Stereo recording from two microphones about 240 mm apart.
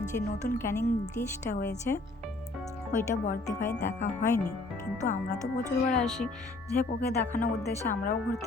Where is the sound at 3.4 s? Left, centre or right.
Centre.